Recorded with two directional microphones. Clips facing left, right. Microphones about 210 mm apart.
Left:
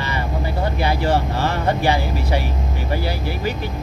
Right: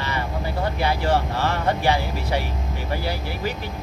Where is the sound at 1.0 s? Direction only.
40° left (ahead or behind).